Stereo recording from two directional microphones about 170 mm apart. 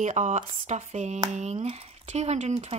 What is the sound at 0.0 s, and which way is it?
Speech, 45° right (ahead or behind).